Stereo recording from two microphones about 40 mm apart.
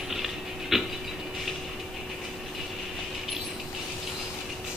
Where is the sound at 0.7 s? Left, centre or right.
Centre.